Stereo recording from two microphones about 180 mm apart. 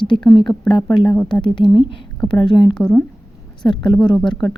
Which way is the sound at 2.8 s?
5° left (ahead or behind).